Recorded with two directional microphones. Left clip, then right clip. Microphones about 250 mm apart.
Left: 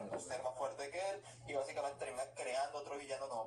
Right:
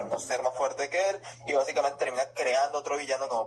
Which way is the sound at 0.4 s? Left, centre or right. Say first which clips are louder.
Right 14 dB; right.